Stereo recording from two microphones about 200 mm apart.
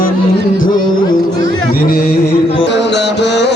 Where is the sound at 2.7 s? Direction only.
60° left (ahead or behind).